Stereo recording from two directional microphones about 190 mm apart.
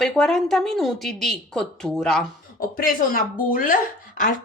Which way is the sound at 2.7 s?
50° left (ahead or behind).